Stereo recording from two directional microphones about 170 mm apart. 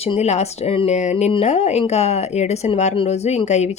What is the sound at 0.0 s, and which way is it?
Speech, 40° left (ahead or behind).